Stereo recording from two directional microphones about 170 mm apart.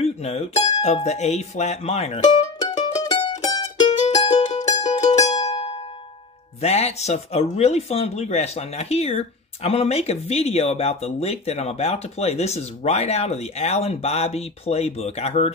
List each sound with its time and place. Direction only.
0.0 s speech: 40° left (ahead or behind)
2.8 s mandolin: 25° left (ahead or behind)
4.1 s music: 25° left (ahead or behind)
6.6 s speech: 40° left (ahead or behind)